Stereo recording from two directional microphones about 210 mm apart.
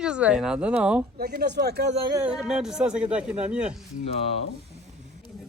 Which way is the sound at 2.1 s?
5° right (ahead or behind).